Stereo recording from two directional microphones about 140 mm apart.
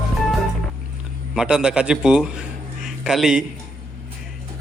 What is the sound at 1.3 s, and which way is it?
Speech, 5° right (ahead or behind).